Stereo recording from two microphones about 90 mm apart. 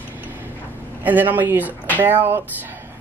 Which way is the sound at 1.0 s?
20° right (ahead or behind).